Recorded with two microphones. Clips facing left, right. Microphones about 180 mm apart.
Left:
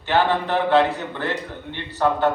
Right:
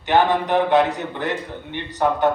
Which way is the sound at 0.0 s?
15° right (ahead or behind).